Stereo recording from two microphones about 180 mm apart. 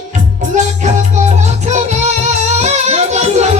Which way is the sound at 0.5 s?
40° right (ahead or behind).